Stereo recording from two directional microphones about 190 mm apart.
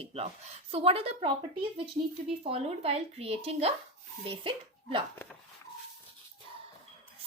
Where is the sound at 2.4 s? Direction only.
30° right (ahead or behind).